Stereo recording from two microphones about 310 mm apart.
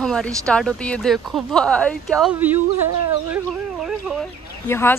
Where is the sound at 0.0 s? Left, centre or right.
Centre.